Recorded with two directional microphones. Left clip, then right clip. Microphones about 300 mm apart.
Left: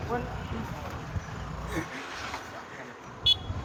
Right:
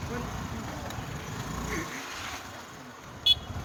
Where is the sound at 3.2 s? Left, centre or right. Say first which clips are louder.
Right 1 dB; centre.